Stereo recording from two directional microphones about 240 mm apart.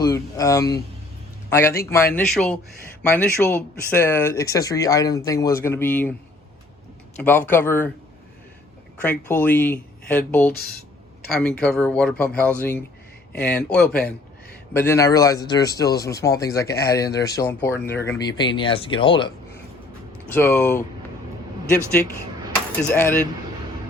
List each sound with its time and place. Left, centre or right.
0.0 s speech: centre
7.2 s speech: centre
9.0 s speech: centre
20.3 s speech: centre
22.8 s speech: centre